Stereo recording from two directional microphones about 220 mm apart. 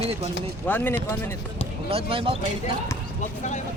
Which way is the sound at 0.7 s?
10° left (ahead or behind).